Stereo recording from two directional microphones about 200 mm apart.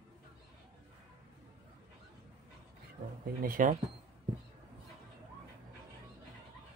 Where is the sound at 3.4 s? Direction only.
45° right (ahead or behind).